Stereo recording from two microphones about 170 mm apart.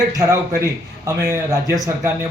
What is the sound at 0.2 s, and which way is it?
A man's voice, 20° right (ahead or behind).